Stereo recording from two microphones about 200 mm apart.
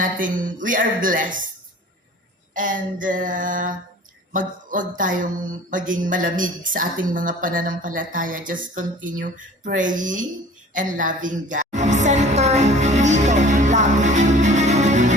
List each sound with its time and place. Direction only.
0.0 s mantra: 40° right (ahead or behind)
2.6 s mantra: 40° right (ahead or behind)
10.8 s a sound: 40° right (ahead or behind)